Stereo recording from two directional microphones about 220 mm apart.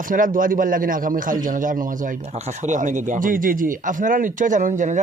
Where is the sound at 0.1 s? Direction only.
40° right (ahead or behind).